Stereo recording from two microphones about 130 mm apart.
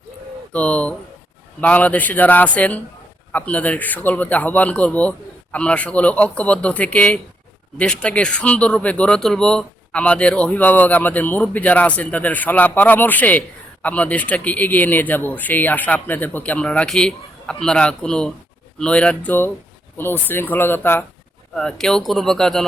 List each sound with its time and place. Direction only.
0.5 s speech: 10° left (ahead or behind)
21.5 s speech: 5° left (ahead or behind)